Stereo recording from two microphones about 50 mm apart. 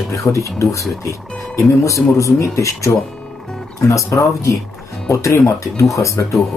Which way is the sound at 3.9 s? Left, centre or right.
Left.